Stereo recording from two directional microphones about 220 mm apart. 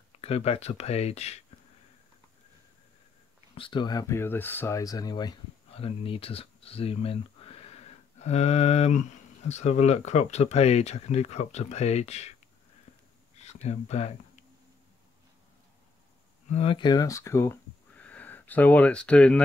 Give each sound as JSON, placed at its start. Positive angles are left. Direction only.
{"t": 0.2, "sound": "speech", "side_deg": 25}
{"t": 3.5, "sound": "speech", "side_deg": 20}
{"t": 13.4, "sound": "speech", "side_deg": 30}
{"t": 16.4, "sound": "speech", "side_deg": 30}